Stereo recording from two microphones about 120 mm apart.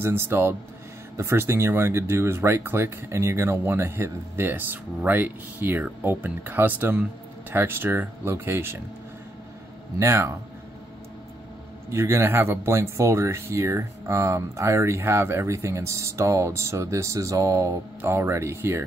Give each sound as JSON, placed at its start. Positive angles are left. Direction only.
{"t": 0.0, "sound": "speech", "side_deg": -20}
{"t": 9.9, "sound": "speech", "side_deg": -25}
{"t": 11.9, "sound": "speech", "side_deg": -20}